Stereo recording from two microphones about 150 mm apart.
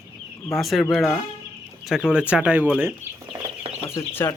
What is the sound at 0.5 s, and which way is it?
Speech, centre (ahead or behind).